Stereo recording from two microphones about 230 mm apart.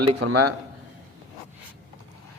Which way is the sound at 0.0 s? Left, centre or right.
Right.